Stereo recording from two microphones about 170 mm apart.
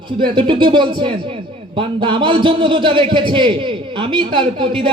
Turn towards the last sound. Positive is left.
turn(degrees=-30)  # may be behind; listen again after turning